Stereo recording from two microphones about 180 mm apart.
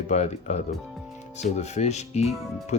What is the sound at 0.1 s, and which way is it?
Speech, 40° left (ahead or behind).